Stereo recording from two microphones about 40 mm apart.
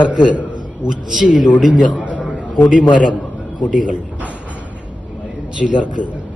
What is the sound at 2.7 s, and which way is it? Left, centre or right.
A man's voice, right.